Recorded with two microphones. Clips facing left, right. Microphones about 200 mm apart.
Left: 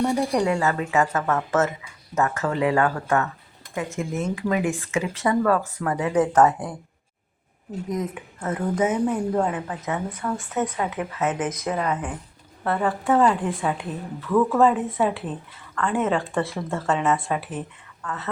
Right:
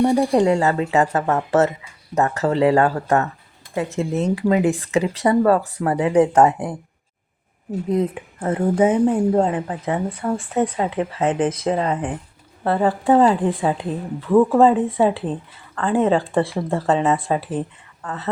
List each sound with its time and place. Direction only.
0.0 s speech: 20° right (ahead or behind)
0.3 s speech: 35° right (ahead or behind)
7.9 s speech: 30° right (ahead or behind)